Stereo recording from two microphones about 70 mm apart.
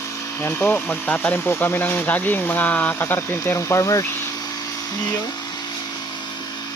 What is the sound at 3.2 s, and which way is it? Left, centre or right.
Speech, left.